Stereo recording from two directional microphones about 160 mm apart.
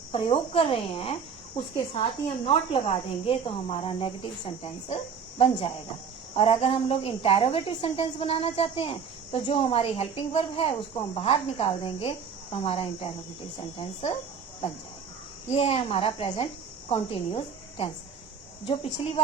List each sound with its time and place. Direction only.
0.1 s a woman's voice: 35° left (ahead or behind)
15.4 s a woman's voice: 40° left (ahead or behind)